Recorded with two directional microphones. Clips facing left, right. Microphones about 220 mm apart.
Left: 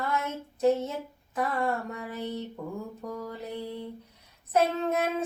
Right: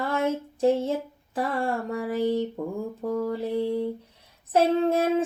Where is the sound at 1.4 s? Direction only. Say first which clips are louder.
Right 2 dB; 30° right (ahead or behind).